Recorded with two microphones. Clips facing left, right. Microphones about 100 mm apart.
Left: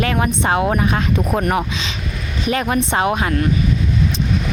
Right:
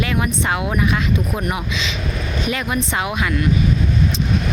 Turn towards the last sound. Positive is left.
turn(degrees=40)  # may be behind; listen again after turning